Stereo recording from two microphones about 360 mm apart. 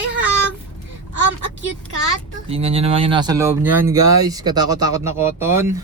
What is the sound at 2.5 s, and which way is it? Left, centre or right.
Speech, centre.